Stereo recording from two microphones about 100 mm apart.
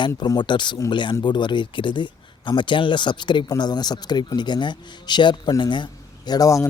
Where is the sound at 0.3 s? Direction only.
50° left (ahead or behind).